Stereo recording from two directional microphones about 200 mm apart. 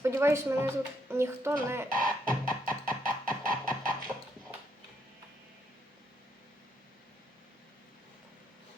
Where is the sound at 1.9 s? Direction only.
45° right (ahead or behind).